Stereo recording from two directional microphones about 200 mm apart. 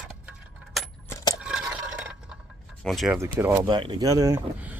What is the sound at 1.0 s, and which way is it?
Coin, 15° left (ahead or behind).